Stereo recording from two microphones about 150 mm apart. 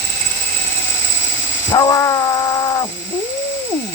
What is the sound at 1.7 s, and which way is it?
Cat, 20° left (ahead or behind).